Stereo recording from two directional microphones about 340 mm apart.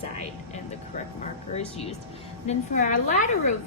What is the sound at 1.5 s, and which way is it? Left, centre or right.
A woman's voice, centre.